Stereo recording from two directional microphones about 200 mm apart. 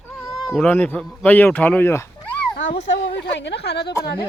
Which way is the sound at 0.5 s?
10° left (ahead or behind).